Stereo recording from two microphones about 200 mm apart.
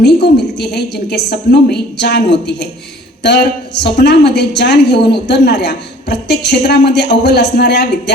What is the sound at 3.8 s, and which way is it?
A woman's voice, 55° left (ahead or behind).